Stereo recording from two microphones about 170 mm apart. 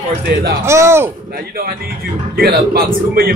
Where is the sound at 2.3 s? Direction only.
65° right (ahead or behind).